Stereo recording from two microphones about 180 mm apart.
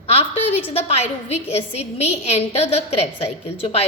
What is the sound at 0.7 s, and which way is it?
A woman's voice, 35° left (ahead or behind).